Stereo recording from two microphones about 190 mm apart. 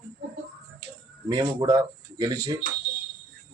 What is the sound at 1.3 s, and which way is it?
Speech, 20° right (ahead or behind).